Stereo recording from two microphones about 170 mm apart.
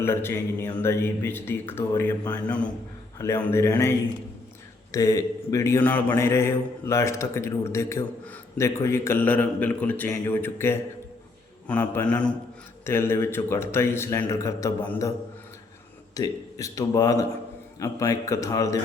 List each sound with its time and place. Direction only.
0.0 s a man's voice: 15° left (ahead or behind)
16.1 s speech: 20° left (ahead or behind)